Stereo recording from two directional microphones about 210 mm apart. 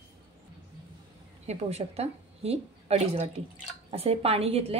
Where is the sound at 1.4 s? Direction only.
30° right (ahead or behind).